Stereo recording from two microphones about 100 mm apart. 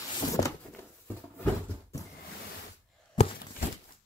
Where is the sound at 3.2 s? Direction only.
90° left.